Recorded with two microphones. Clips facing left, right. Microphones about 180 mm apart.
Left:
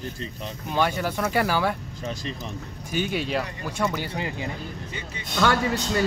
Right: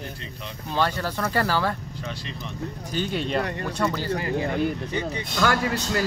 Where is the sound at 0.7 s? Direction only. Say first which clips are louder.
Left 1 dB; 15° left (ahead or behind).